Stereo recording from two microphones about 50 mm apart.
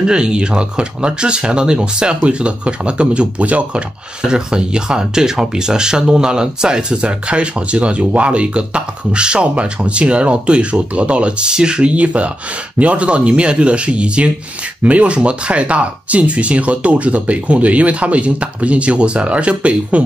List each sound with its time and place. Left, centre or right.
0.0 s speech: centre
4.2 s speech: centre